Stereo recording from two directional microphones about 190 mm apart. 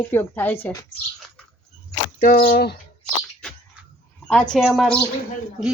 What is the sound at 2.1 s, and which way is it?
Speech, 50° left (ahead or behind).